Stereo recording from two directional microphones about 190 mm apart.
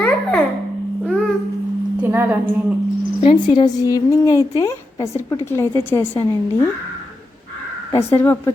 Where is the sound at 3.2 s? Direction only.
25° left (ahead or behind).